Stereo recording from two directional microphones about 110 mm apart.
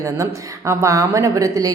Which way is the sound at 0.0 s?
25° right (ahead or behind).